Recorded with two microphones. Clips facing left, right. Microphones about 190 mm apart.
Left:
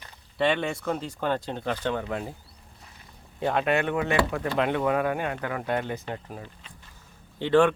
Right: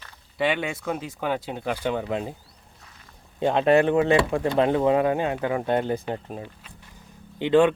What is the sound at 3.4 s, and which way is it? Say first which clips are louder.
Speech: right 6 dB; 25° right (ahead or behind).